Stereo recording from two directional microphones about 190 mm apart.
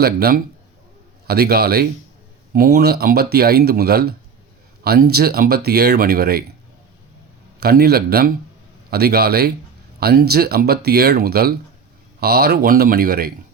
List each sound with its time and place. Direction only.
0.0 s speech: 55° right (ahead or behind)
7.6 s speech: 55° right (ahead or behind)